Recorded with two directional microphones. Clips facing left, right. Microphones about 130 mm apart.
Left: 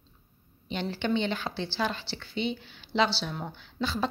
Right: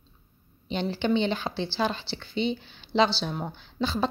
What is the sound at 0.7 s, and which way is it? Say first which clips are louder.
A woman's voice: right 3 dB; 20° right (ahead or behind).